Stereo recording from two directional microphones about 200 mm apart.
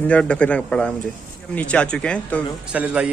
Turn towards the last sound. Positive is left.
turn(degrees=-5)  # may be behind; listen again after turning